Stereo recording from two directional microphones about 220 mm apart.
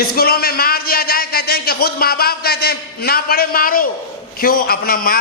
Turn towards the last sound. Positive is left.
turn(degrees=40)  # may be behind; listen again after turning